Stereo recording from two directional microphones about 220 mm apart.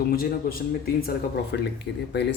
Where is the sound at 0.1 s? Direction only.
45° left (ahead or behind).